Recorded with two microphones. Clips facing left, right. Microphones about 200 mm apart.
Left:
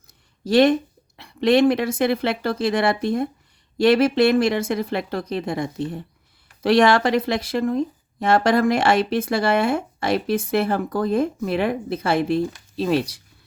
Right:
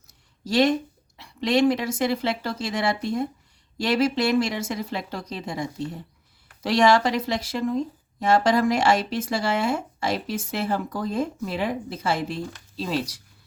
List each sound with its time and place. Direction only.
0.4 s speech: 60° left (ahead or behind)